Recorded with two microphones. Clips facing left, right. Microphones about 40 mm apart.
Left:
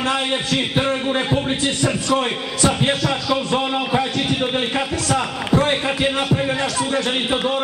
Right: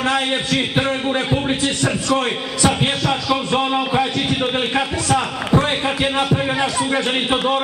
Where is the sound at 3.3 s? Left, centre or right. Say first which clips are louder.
Right 1 dB; centre.